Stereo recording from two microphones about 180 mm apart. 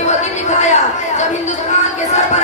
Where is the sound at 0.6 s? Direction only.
40° left (ahead or behind).